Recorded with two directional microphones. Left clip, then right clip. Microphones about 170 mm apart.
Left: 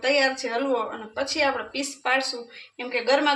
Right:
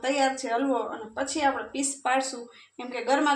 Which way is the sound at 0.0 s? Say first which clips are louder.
Left 4 dB; 35° right (ahead or behind).